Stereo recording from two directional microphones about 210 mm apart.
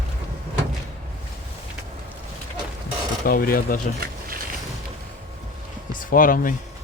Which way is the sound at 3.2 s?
45° left (ahead or behind).